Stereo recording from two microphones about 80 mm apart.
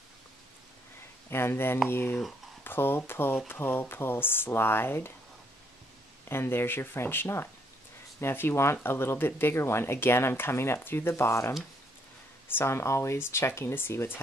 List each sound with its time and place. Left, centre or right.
1.3 s speech: left
6.2 s speech: left